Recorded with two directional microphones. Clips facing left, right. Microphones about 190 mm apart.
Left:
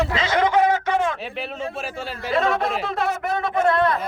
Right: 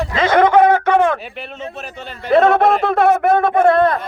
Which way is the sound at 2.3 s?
60° right (ahead or behind).